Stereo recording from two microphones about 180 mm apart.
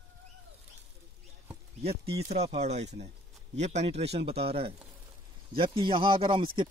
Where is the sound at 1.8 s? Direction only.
35° right (ahead or behind).